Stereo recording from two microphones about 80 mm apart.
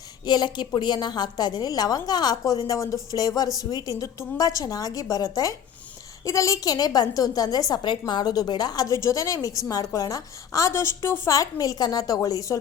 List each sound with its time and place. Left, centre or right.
0.3 s a woman's voice: left
7.8 s a woman's voice: left
11.3 s a woman's voice: left